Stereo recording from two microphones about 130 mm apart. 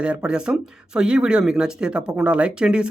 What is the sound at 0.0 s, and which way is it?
A man's voice, 5° right (ahead or behind).